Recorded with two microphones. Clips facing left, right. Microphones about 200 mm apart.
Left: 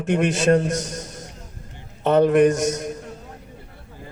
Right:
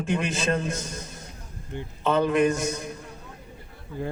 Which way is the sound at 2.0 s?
50° left (ahead or behind).